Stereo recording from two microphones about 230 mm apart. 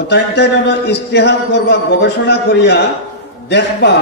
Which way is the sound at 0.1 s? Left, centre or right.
Left.